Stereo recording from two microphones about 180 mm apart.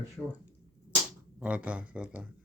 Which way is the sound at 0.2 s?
5° left (ahead or behind).